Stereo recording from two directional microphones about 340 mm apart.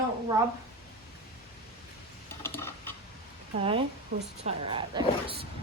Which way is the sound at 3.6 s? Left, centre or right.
Centre.